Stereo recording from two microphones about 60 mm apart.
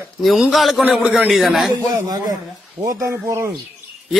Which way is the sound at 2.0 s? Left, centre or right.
Right.